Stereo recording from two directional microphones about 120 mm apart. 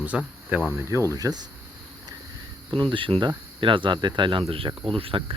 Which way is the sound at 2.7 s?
45° right (ahead or behind).